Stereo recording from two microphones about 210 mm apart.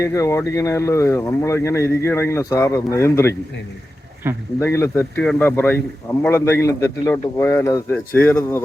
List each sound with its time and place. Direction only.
0.0 s speech: 15° left (ahead or behind)
4.2 s speech: 10° right (ahead or behind)
4.6 s speech: 10° left (ahead or behind)